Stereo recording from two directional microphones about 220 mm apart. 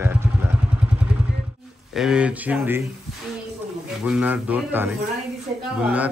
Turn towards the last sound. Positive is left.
turn(degrees=-5)  # may be behind; listen again after turning